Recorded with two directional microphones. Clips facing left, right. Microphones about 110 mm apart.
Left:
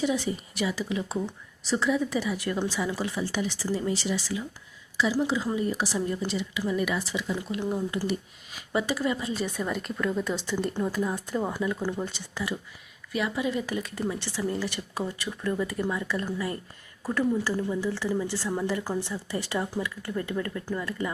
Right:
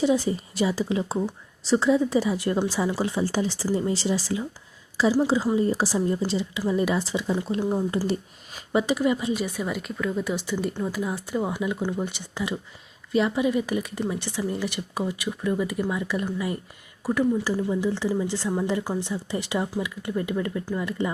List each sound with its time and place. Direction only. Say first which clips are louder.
0.0 s a woman's voice: right 5 dB; 30° right (ahead or behind)
8.7 s a woman's voice: right 5 dB; 20° right (ahead or behind)